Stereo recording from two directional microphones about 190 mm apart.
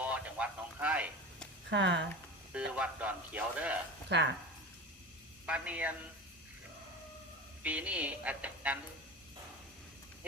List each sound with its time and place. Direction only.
0.0 s a sound: 5° right (ahead or behind)
1.7 s speech: 70° right (ahead or behind)
2.5 s speech: 5° right (ahead or behind)
4.1 s speech: 65° right (ahead or behind)
5.5 s speech: 5° right (ahead or behind)
7.6 s speech: 5° right (ahead or behind)